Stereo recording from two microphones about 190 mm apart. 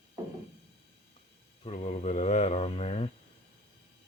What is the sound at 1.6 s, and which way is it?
Mantra, 35° left (ahead or behind).